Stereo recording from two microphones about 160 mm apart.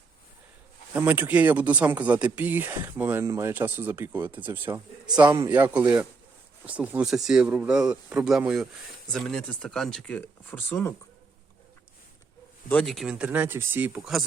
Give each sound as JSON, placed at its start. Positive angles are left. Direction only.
{"t": 0.9, "sound": "speech", "side_deg": -10}
{"t": 5.1, "sound": "a man's voice", "side_deg": -25}
{"t": 5.5, "sound": "speech", "side_deg": -10}
{"t": 12.8, "sound": "speech", "side_deg": 0}